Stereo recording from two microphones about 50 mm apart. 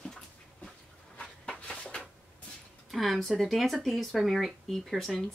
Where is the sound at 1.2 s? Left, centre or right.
Left.